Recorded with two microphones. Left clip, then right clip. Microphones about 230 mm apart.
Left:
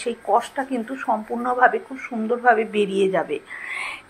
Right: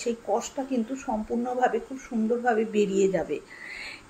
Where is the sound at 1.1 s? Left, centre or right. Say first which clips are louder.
Left 9 dB; left.